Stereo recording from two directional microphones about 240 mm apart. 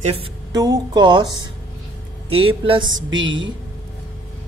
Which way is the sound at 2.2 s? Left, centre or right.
Right.